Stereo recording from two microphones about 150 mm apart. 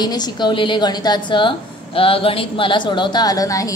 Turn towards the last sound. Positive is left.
turn(degrees=25)  # may be behind; listen again after turning